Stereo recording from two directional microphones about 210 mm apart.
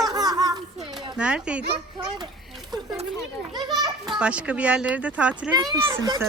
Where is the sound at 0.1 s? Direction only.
20° right (ahead or behind).